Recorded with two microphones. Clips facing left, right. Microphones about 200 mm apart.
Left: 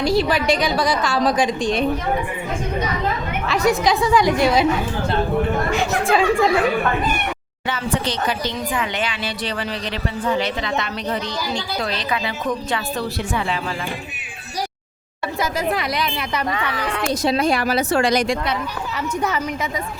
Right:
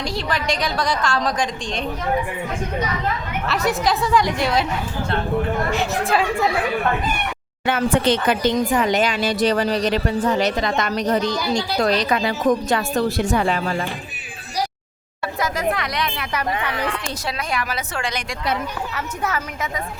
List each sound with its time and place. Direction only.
0.0 s a woman's voice: 5° left (ahead or behind)
3.5 s a woman's voice: centre (ahead or behind)
5.7 s a woman's voice: 5° right (ahead or behind)
7.7 s speech: 55° right (ahead or behind)
15.7 s a woman's voice: 5° left (ahead or behind)
17.2 s speech: 30° left (ahead or behind)